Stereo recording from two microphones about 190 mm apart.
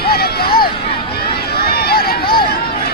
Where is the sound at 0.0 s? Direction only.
55° left (ahead or behind).